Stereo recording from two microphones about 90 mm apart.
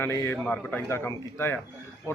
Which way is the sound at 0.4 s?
10° left (ahead or behind).